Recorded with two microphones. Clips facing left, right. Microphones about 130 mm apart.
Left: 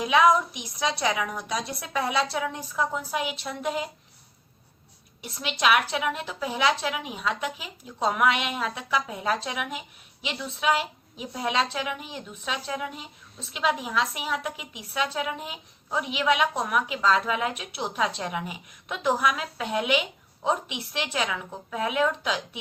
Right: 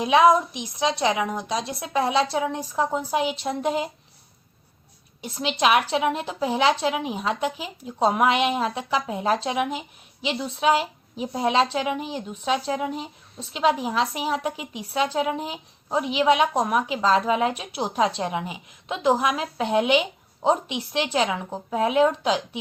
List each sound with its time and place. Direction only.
0.0 s a woman's voice: 30° right (ahead or behind)
5.2 s a woman's voice: 30° right (ahead or behind)